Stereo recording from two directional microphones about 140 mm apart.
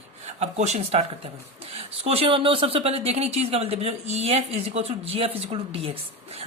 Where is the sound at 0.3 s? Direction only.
55° right (ahead or behind).